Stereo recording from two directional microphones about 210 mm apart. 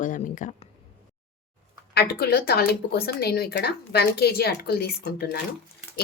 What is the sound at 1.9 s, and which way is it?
A woman's voice, 50° left (ahead or behind).